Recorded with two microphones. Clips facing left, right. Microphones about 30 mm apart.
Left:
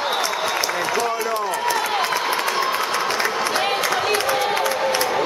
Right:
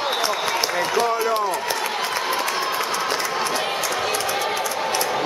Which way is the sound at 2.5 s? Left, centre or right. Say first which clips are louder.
Left 2 dB; centre.